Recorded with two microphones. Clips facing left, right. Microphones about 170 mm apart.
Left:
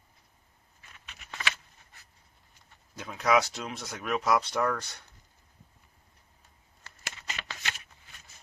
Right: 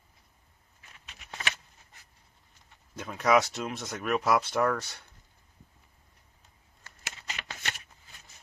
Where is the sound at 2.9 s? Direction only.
Centre (ahead or behind).